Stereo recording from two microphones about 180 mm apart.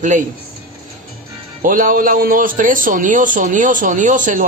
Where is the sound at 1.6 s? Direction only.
50° right (ahead or behind).